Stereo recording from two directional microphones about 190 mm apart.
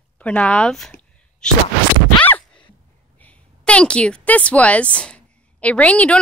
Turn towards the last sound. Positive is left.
turn(degrees=5)  # may be behind; listen again after turning